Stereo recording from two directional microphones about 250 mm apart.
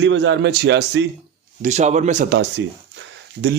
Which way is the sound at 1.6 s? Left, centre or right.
Right.